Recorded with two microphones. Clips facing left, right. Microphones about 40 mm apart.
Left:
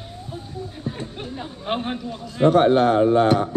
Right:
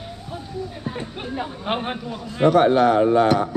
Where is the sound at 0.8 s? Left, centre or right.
Right.